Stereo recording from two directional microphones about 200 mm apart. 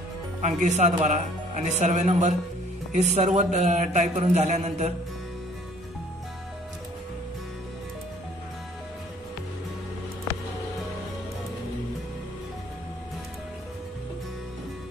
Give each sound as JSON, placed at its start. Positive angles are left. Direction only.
{"t": 0.4, "sound": "a man's voice", "side_deg": -35}